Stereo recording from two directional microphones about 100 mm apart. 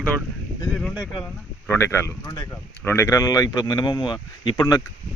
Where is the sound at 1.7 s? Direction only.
25° left (ahead or behind).